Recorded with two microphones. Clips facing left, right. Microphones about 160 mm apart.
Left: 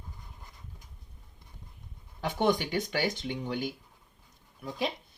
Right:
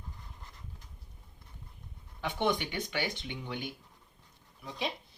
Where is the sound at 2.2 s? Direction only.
40° left (ahead or behind).